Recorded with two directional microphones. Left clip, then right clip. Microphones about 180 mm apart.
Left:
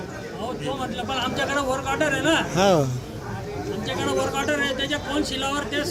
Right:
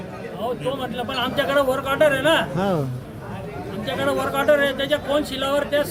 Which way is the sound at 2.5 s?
10° left (ahead or behind).